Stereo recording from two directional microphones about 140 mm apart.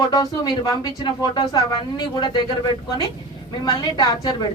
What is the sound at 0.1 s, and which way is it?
Speech, 25° left (ahead or behind).